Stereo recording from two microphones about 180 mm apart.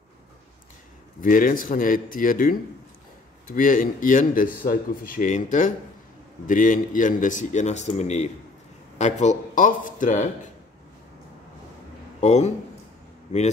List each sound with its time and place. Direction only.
1.2 s speech: 50° left (ahead or behind)
12.2 s a man's voice: 40° left (ahead or behind)